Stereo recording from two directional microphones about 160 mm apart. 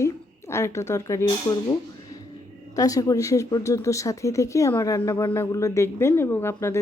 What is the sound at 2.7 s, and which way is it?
Speech, 20° left (ahead or behind).